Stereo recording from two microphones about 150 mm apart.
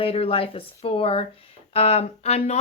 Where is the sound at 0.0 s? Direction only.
40° left (ahead or behind).